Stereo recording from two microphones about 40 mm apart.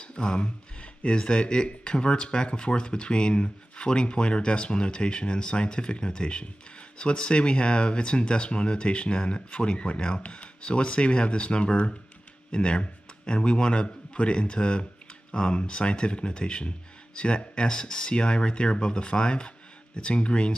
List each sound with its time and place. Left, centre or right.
0.0 s a man's voice: left